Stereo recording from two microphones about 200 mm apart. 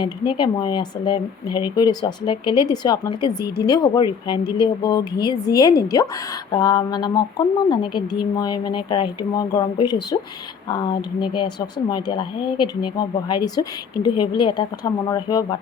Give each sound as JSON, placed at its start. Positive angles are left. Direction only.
{"t": 0.0, "sound": "a woman's voice", "side_deg": 25}